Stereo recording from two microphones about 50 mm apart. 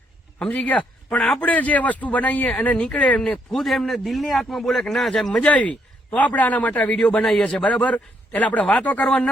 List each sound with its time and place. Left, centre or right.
0.3 s a man's voice: left
3.2 s a man's voice: centre
5.3 s speech: left
6.9 s a man's voice: left
7.6 s speech: left